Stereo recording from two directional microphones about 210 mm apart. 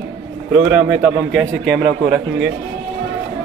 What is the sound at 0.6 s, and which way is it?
Speech, 10° right (ahead or behind).